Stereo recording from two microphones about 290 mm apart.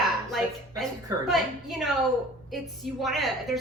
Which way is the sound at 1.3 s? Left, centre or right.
Centre.